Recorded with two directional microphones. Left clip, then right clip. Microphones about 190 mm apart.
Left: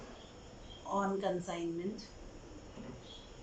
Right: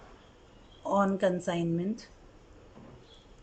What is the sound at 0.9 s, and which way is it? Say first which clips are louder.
Speech: right 7 dB; 60° right (ahead or behind).